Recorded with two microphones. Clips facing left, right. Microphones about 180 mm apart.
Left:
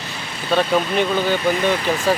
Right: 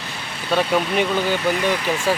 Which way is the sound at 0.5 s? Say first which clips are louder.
Left 1 dB; 10° right (ahead or behind).